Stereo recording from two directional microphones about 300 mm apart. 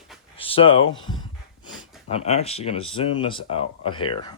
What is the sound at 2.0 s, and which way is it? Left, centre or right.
Speech, left.